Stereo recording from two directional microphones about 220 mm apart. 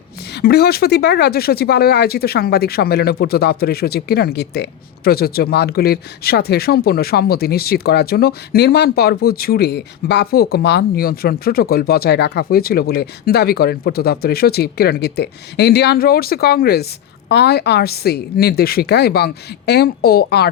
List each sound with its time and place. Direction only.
0.3 s speech: 45° left (ahead or behind)